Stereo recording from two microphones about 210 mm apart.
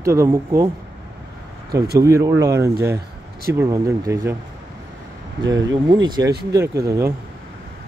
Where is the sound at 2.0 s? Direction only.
15° right (ahead or behind).